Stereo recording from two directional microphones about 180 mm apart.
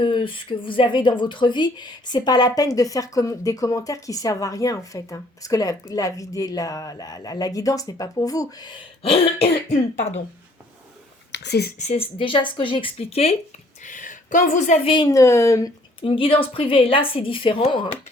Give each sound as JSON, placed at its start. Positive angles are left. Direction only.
{"t": 0.0, "sound": "speech", "side_deg": 30}
{"t": 9.0, "sound": "cough", "side_deg": 30}
{"t": 11.3, "sound": "a sound", "side_deg": 65}
{"t": 11.8, "sound": "speech", "side_deg": 35}
{"t": 13.8, "sound": "speech", "side_deg": 45}
{"t": 14.9, "sound": "speech", "side_deg": 20}